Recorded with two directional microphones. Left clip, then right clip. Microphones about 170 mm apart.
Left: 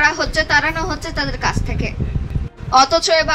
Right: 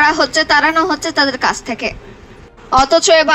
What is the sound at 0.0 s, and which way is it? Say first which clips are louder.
A man's voice: right 4 dB; 45° right (ahead or behind).